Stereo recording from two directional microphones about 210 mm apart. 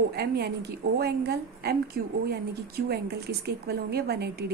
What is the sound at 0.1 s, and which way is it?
Speech, 50° right (ahead or behind).